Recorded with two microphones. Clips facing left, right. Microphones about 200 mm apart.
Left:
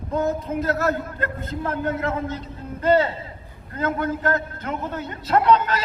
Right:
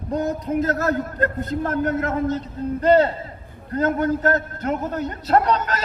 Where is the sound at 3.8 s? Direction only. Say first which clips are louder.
Right 4 dB; 40° right (ahead or behind).